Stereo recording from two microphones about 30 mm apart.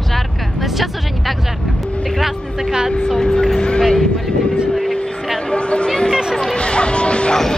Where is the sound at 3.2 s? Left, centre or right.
Left.